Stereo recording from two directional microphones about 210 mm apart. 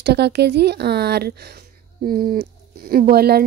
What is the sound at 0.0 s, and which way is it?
Speech, 50° right (ahead or behind).